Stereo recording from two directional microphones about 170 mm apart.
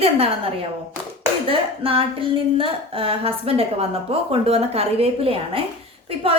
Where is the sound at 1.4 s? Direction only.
35° right (ahead or behind).